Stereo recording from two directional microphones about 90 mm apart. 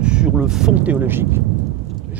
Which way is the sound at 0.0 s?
10° right (ahead or behind).